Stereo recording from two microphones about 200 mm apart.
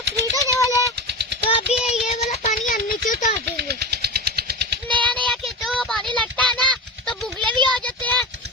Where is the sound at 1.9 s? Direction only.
30° left (ahead or behind).